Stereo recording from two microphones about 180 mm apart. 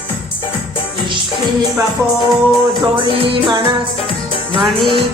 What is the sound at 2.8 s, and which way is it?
Music, 30° right (ahead or behind).